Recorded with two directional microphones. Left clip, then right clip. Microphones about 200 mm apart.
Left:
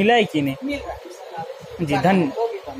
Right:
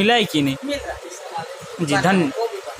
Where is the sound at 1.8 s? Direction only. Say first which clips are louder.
Right 1 dB; 15° right (ahead or behind).